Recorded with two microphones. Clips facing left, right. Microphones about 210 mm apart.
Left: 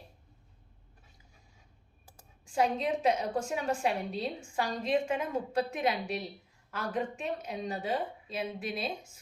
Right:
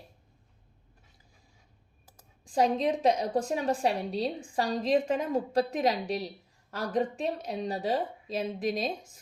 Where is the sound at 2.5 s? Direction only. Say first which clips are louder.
Right 3 dB; 35° right (ahead or behind).